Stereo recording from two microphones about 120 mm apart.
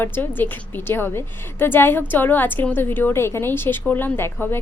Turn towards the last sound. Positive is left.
turn(degrees=20)  # may be behind; listen again after turning